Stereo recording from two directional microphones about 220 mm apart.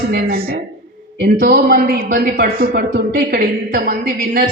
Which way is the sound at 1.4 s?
45° right (ahead or behind).